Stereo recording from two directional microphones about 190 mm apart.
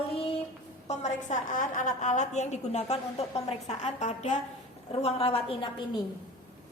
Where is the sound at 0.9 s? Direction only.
40° left (ahead or behind).